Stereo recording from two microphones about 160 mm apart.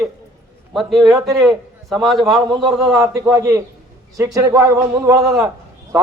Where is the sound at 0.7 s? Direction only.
Centre (ahead or behind).